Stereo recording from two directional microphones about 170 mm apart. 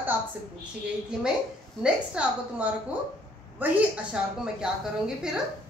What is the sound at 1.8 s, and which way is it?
A woman's voice, 5° right (ahead or behind).